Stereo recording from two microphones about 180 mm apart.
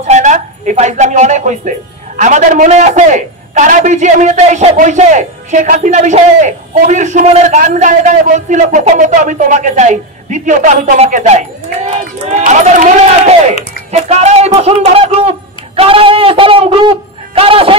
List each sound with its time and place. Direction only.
0.0 s speech: 40° right (ahead or behind)